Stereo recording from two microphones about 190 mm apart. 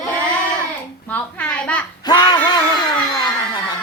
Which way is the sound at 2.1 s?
20° left (ahead or behind).